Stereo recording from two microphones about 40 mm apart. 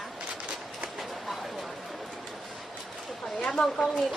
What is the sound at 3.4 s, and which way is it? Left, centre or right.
Speech, left.